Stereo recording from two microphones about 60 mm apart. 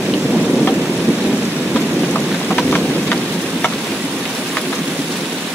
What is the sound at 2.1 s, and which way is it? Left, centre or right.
Rain, left.